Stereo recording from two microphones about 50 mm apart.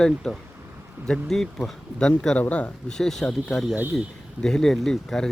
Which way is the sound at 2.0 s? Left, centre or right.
Centre.